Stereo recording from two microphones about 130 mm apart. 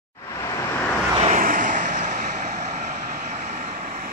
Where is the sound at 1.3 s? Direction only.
90° right.